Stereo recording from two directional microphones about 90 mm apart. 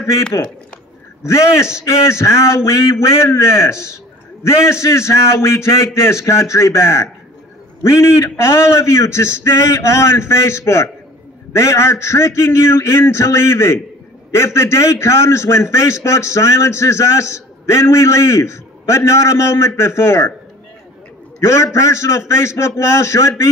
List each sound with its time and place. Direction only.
1.2 s a man's voice: 30° left (ahead or behind)
21.4 s a man's voice: 30° left (ahead or behind)